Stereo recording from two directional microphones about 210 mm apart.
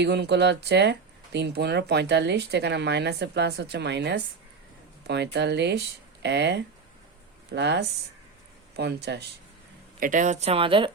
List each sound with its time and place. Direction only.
0.0 s speech: 55° right (ahead or behind)
10.0 s speech: 35° right (ahead or behind)